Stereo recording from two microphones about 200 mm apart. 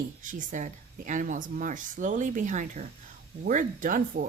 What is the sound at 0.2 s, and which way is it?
Speech, 40° right (ahead or behind).